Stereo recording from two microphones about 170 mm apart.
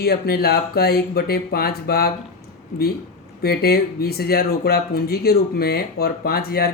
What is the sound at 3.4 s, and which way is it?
Speech, 70° left (ahead or behind).